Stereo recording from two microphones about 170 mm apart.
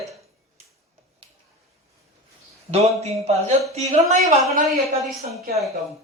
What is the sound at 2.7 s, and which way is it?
A man's voice, 35° right (ahead or behind).